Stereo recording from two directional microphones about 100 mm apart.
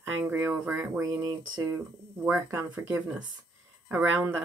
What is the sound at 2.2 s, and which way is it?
Speech, 15° right (ahead or behind).